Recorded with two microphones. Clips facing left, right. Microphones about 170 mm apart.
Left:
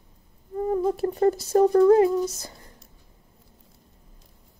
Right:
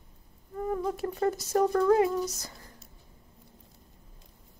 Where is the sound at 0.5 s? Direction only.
30° left (ahead or behind).